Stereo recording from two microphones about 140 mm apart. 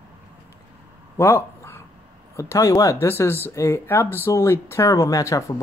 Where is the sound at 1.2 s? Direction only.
20° left (ahead or behind).